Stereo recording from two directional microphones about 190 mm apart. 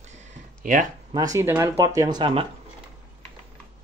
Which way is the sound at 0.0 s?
35° right (ahead or behind).